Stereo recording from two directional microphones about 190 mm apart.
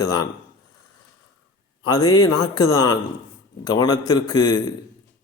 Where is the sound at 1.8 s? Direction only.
20° left (ahead or behind).